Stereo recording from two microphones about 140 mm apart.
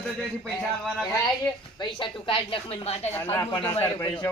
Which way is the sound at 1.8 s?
35° left (ahead or behind).